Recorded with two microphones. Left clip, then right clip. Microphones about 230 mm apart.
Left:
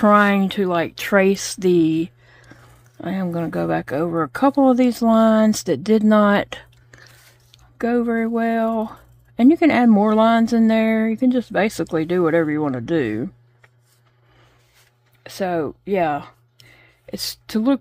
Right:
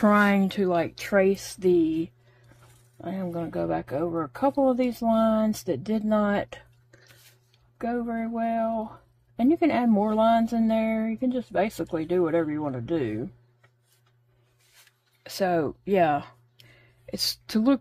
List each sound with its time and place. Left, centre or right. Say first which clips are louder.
0.0 s speech: left 7 dB; left
2.5 s whispering: left 9 dB; left
3.0 s speech: left 7 dB; left
15.2 s speech: left 2 dB; centre